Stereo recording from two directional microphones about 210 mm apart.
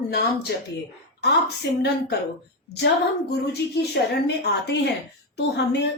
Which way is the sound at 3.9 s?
55° left (ahead or behind).